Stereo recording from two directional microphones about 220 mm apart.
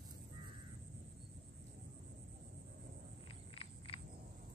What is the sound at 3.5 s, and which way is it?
Frog, 25° left (ahead or behind).